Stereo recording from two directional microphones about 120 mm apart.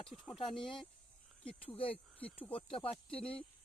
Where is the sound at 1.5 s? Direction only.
50° left (ahead or behind).